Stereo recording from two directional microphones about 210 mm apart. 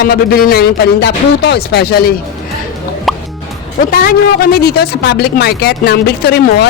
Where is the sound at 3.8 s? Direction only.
45° left (ahead or behind).